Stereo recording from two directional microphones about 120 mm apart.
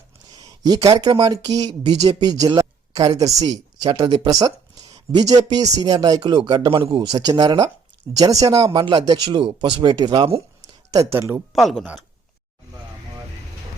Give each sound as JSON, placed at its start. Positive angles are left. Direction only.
{"t": 0.3, "sound": "a sound", "side_deg": -35}
{"t": 0.9, "sound": "speech", "side_deg": -40}
{"t": 3.4, "sound": "speech", "side_deg": -40}
{"t": 4.3, "sound": "speech", "side_deg": -30}
{"t": 8.7, "sound": "speech", "side_deg": -40}
{"t": 10.9, "sound": "speech", "side_deg": -25}
{"t": 11.5, "sound": "speech", "side_deg": 0}